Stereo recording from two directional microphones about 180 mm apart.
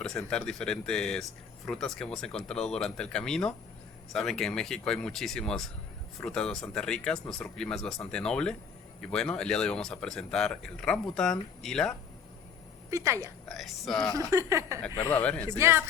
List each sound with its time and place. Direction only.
0.0 s speech: 5° left (ahead or behind)
12.9 s speech: 15° right (ahead or behind)
13.5 s speech: centre (ahead or behind)
14.1 s speech: 20° right (ahead or behind)
14.8 s speech: 25° left (ahead or behind)
15.1 s speech: 5° left (ahead or behind)
15.4 s speech: 15° right (ahead or behind)